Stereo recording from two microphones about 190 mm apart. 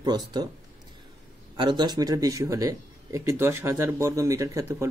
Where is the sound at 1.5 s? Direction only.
25° right (ahead or behind).